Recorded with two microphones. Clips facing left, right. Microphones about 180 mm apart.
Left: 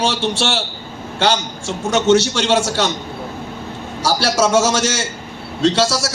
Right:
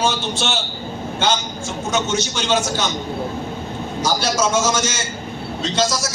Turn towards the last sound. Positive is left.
turn(degrees=70)  # may be behind; listen again after turning